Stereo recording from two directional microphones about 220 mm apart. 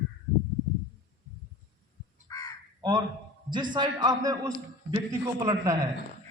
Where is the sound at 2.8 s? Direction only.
20° right (ahead or behind).